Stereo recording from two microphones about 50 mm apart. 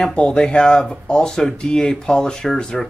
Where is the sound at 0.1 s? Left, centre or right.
Centre.